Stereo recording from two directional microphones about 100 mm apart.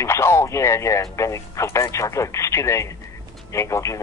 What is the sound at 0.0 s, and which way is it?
Speech, 25° left (ahead or behind).